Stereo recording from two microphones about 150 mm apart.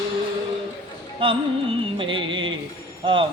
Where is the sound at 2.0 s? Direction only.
35° right (ahead or behind).